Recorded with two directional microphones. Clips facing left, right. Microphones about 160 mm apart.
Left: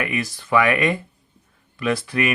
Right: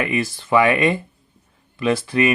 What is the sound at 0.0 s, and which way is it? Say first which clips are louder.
Speech: right 3 dB; 25° right (ahead or behind).